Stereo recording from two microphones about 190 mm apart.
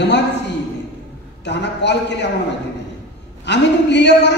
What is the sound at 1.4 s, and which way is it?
Speech, 65° left (ahead or behind).